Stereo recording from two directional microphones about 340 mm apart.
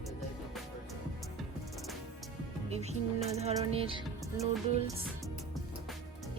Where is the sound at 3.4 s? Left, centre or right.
Centre.